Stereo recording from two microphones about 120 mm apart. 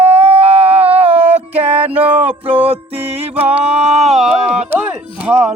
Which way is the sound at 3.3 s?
15° right (ahead or behind).